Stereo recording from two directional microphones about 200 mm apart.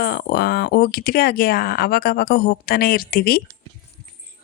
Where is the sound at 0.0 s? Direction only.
50° left (ahead or behind).